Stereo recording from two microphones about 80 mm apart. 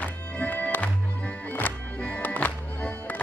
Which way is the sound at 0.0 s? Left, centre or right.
Centre.